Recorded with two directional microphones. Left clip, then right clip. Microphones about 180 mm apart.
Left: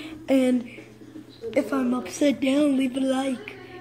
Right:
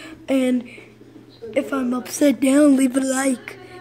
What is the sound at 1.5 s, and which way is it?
A woman's voice, 15° right (ahead or behind).